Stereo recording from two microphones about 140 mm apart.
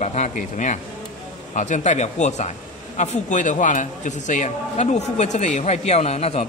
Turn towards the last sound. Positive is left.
turn(degrees=45)  # may be behind; listen again after turning